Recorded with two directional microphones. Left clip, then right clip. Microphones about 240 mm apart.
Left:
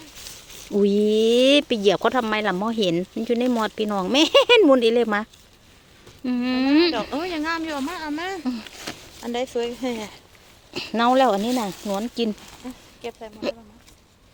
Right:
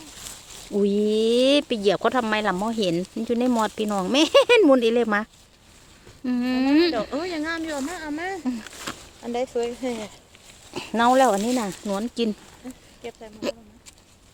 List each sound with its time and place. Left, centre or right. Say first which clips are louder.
0.7 s speech: left 3 dB; centre
7.3 s speech: left 2 dB; left
10.8 s speech: even; centre
12.6 s speech: left 3 dB; left